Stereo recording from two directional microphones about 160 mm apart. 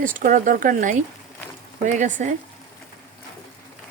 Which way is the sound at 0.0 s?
55° right (ahead or behind).